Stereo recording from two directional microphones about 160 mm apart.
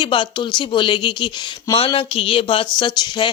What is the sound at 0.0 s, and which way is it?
A woman's voice, 30° left (ahead or behind).